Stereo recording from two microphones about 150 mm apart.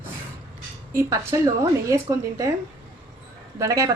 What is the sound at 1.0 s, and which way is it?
Speech, 20° right (ahead or behind).